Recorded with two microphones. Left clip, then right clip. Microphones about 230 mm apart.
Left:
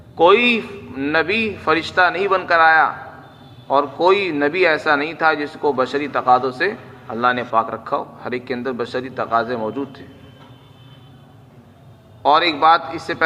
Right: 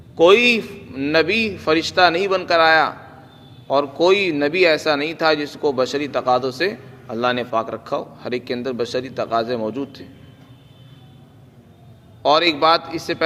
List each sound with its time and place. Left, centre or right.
0.2 s a man's voice: right
12.2 s a man's voice: right